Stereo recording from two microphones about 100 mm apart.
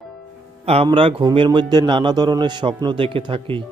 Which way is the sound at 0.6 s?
90° right.